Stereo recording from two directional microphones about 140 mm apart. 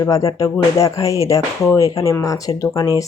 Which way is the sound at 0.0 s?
25° left (ahead or behind).